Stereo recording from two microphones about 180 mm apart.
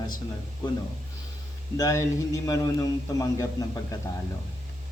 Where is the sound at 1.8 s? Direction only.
20° left (ahead or behind).